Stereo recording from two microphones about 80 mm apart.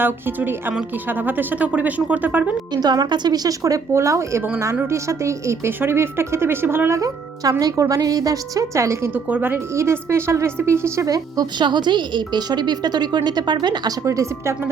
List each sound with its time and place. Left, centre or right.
0.0 s speech: right
2.7 s a woman's voice: right
7.6 s a woman's voice: right
9.1 s speech: right
9.7 s a woman's voice: right
11.5 s a woman's voice: right
14.0 s a woman's voice: right